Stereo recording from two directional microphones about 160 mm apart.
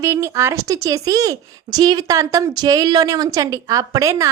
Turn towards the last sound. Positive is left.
turn(degrees=-20)  # may be behind; listen again after turning